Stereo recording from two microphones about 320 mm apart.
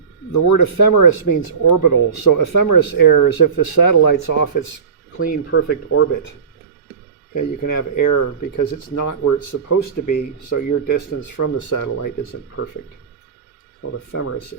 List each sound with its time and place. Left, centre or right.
0.3 s speech: left
5.5 s speech: left
7.3 s speech: left
14.1 s speech: left